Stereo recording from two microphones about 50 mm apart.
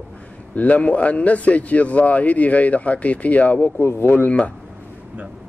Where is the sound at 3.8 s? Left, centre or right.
Left.